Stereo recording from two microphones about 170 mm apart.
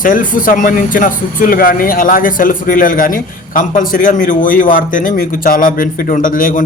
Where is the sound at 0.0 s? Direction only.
55° left (ahead or behind).